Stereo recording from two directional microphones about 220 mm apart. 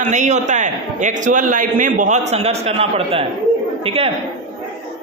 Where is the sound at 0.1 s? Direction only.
35° right (ahead or behind).